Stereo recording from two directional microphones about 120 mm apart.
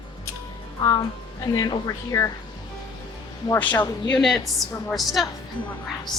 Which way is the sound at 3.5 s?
15° left (ahead or behind).